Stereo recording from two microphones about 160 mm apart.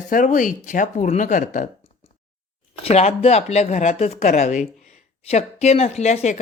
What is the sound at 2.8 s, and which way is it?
Speech, 40° left (ahead or behind).